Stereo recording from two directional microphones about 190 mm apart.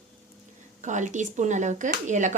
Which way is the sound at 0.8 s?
40° right (ahead or behind).